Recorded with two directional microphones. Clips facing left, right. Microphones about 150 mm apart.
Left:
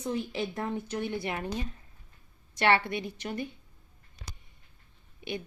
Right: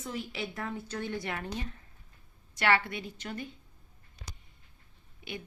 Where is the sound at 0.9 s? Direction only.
15° left (ahead or behind).